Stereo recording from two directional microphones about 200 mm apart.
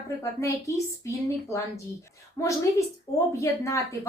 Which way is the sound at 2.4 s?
15° left (ahead or behind).